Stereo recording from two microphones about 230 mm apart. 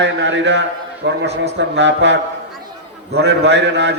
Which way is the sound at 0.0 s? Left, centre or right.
Right.